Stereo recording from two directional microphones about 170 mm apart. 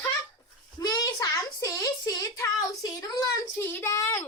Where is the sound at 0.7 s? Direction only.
20° left (ahead or behind).